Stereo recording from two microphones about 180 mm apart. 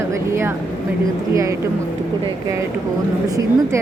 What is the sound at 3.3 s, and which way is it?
Speech, 20° right (ahead or behind).